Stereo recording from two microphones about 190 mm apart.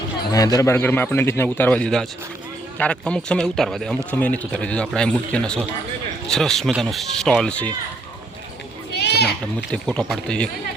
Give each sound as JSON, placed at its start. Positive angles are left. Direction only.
{"t": 0.3, "sound": "a man's voice", "side_deg": 20}
{"t": 9.0, "sound": "children playing", "side_deg": 60}
{"t": 9.7, "sound": "a man's voice", "side_deg": 5}